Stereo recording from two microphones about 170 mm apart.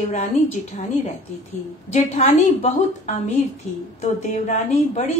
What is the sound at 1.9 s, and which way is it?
A woman's voice, 40° left (ahead or behind).